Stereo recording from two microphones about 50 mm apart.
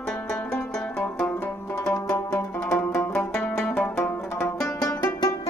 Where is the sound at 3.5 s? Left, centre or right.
Left.